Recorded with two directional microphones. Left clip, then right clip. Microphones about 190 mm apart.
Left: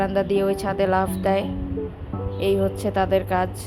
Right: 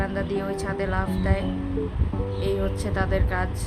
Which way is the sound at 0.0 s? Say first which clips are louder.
Left 7 dB; 25° left (ahead or behind).